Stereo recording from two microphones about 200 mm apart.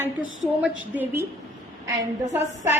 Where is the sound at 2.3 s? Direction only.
10° right (ahead or behind).